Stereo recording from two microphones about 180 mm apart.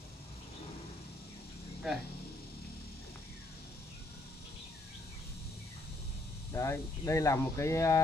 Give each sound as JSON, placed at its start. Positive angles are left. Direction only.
{"t": 6.5, "sound": "speech", "side_deg": 15}